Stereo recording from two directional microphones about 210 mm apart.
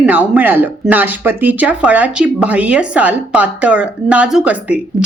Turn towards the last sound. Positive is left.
turn(degrees=-5)  # may be behind; listen again after turning